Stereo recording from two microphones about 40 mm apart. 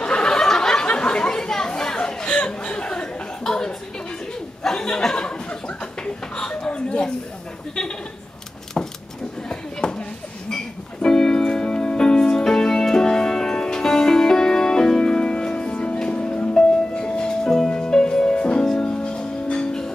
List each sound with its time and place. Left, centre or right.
0.0 s chatter: left
4.6 s a sound: centre
8.8 s keys jangling: centre
9.5 s a sound: left
10.5 s keyboard: centre
15.5 s music: left